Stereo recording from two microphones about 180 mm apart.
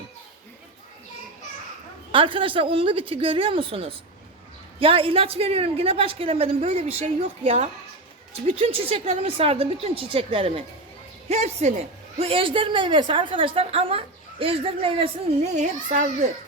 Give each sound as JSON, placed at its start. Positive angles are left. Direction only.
{"t": 2.1, "sound": "a woman's voice", "side_deg": -30}
{"t": 15.5, "sound": "a child's voice", "side_deg": -45}